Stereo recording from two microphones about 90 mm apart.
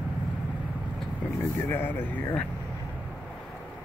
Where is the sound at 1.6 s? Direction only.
25° left (ahead or behind).